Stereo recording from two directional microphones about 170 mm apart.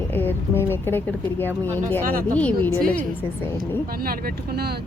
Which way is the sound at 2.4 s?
10° left (ahead or behind).